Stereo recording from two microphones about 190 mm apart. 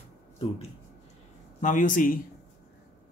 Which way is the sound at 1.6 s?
45° left (ahead or behind).